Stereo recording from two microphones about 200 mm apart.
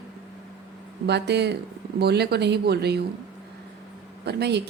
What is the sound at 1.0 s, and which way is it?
A woman's voice, 55° right (ahead or behind).